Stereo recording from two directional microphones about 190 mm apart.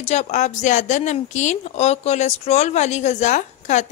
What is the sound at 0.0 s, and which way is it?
Speech, 35° left (ahead or behind).